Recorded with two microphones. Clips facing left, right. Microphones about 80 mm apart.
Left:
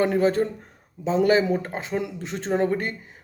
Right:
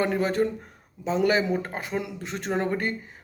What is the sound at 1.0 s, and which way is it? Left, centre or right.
Speech, left.